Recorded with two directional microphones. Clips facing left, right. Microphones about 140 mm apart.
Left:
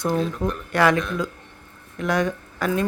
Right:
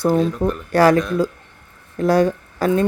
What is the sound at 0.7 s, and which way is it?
Speech, 35° right (ahead or behind).